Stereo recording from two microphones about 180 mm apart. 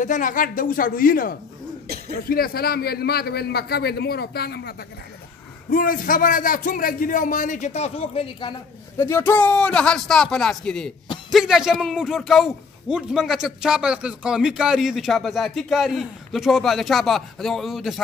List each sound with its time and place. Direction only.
0.0 s a man's voice: 45° left (ahead or behind); by 4.7 s 65° left (ahead or behind)
5.7 s a man's voice: 50° left (ahead or behind); by 8.5 s 30° left (ahead or behind)
8.9 s a man's voice: 15° left (ahead or behind)